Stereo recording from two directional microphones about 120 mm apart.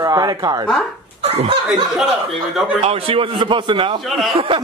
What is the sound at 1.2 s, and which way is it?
Laughter, 60° right (ahead or behind).